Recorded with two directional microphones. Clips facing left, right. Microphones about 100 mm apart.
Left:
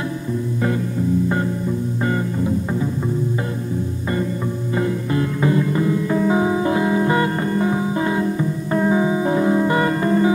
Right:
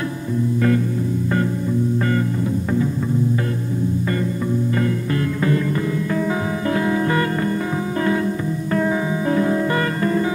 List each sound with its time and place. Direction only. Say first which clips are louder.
2.0 s music: right 1 dB; 20° left (ahead or behind)
4.7 s music: left 1 dB; 20° left (ahead or behind)